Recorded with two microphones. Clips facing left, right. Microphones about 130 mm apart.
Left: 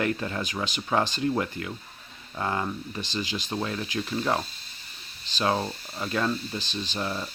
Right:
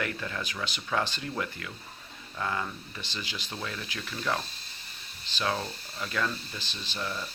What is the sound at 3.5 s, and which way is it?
Speech, 35° left (ahead or behind).